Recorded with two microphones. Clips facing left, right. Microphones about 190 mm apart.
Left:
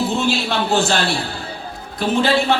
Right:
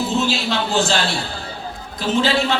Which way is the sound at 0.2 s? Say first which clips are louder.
Left 1 dB; 60° left (ahead or behind).